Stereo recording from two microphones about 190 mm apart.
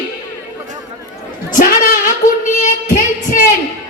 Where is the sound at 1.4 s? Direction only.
45° left (ahead or behind).